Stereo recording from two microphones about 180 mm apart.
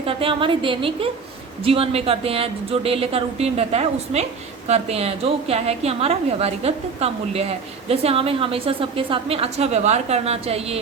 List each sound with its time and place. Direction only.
0.0 s a woman's voice: 30° right (ahead or behind)